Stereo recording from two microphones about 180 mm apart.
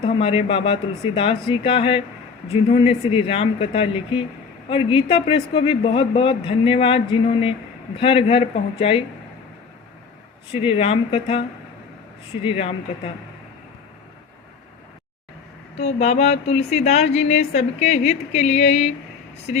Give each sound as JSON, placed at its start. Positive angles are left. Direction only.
{"t": 0.0, "sound": "a man's voice", "side_deg": 30}
{"t": 10.8, "sound": "speech", "side_deg": 30}
{"t": 15.8, "sound": "speech", "side_deg": 35}